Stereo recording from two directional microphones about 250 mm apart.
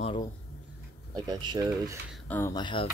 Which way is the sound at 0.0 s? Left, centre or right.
Centre.